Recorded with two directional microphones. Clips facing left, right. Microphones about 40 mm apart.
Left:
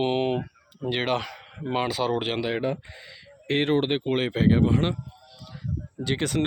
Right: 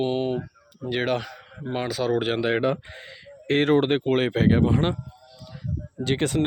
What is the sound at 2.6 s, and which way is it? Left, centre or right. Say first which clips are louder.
Speech: right 4 dB; right.